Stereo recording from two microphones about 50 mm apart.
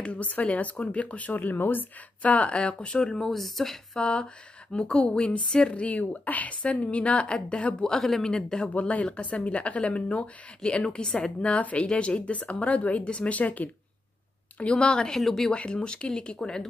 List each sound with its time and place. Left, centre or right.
0.0 s speech: left
2.2 s speech: left; by 3.7 s centre
3.9 s speech: left
7.9 s speech: centre
8.7 s speech: left
14.6 s speech: centre
15.1 s speech: centre
15.5 s speech: centre